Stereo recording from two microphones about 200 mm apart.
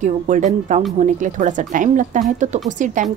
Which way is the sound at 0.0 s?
40° right (ahead or behind).